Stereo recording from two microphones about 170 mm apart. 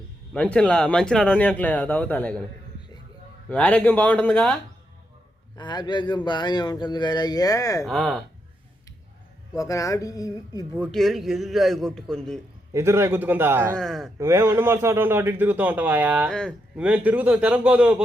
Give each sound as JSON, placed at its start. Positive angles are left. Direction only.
{"t": 0.3, "sound": "speech", "side_deg": 5}
{"t": 3.5, "sound": "speech", "side_deg": 5}
{"t": 5.5, "sound": "speech", "side_deg": 25}
{"t": 7.9, "sound": "a man's voice", "side_deg": 0}
{"t": 9.6, "sound": "speech", "side_deg": 20}
{"t": 10.8, "sound": "a man's voice", "side_deg": 0}
{"t": 12.7, "sound": "a man's voice", "side_deg": -15}
{"t": 13.7, "sound": "a man's voice", "side_deg": 0}
{"t": 14.2, "sound": "a man's voice", "side_deg": -15}
{"t": 16.3, "sound": "a man's voice", "side_deg": 5}
{"t": 16.7, "sound": "a man's voice", "side_deg": -5}